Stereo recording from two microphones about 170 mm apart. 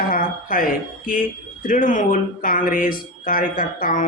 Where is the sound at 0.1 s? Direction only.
55° left (ahead or behind).